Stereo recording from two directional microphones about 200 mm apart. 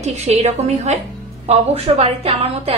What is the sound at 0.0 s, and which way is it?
A woman's voice, 35° right (ahead or behind).